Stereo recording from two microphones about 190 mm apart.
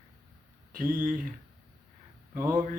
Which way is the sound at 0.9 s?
45° right (ahead or behind).